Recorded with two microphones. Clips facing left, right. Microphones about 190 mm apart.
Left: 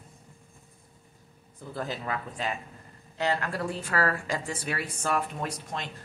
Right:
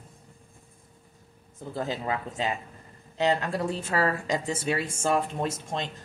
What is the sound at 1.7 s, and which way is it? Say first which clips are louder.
Speech: right 3 dB; 20° right (ahead or behind).